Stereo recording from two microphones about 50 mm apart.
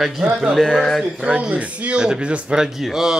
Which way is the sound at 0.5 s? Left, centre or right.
Centre.